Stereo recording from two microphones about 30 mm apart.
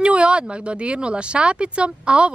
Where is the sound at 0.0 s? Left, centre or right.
Right.